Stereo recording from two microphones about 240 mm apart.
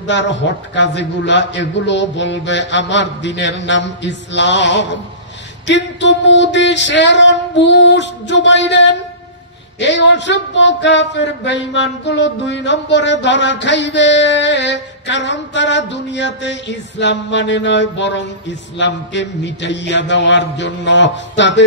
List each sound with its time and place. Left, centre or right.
0.0 s speech: left